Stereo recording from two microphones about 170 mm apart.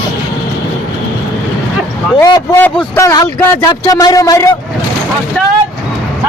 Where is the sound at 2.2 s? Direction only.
20° left (ahead or behind).